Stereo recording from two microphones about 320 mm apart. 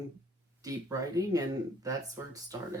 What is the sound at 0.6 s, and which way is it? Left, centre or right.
Speech, centre.